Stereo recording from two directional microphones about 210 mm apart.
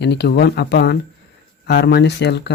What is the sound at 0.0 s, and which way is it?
Speech, 55° left (ahead or behind).